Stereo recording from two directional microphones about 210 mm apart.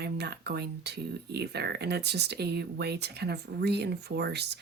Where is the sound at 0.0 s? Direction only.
50° right (ahead or behind).